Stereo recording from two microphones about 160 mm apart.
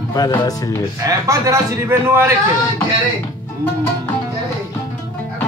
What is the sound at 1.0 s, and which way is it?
A man's voice, 20° right (ahead or behind).